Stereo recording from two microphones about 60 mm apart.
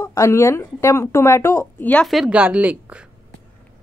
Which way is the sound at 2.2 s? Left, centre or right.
Centre.